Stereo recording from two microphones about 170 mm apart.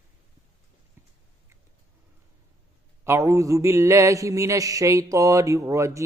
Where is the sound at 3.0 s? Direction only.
15° right (ahead or behind).